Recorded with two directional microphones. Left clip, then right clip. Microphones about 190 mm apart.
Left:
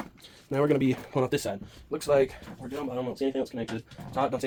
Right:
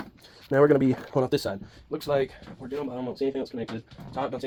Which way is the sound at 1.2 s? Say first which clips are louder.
Right 2 dB; 15° right (ahead or behind).